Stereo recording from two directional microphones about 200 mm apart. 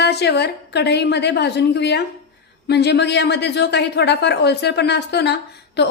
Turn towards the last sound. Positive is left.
turn(degrees=55)  # may be behind; listen again after turning